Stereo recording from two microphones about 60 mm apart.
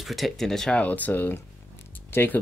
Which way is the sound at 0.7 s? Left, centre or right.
Left.